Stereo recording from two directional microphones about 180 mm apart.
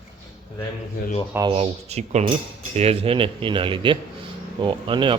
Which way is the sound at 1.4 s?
30° right (ahead or behind).